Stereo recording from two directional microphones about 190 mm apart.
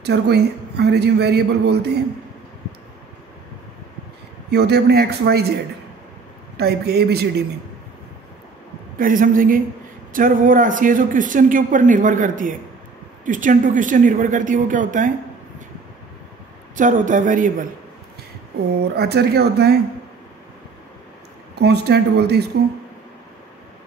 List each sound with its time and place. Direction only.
0.0 s speech: 60° right (ahead or behind)
4.5 s speech: 60° right (ahead or behind)
6.5 s speech: 55° right (ahead or behind)
8.9 s speech: 45° right (ahead or behind)
16.7 s speech: 45° right (ahead or behind)
18.9 s speech: 60° right (ahead or behind)
21.5 s speech: 60° right (ahead or behind)